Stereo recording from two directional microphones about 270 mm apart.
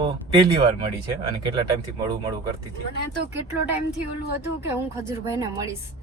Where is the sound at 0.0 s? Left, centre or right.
Centre.